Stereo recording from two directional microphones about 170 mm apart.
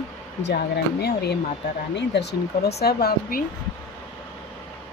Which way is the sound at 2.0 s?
85° left.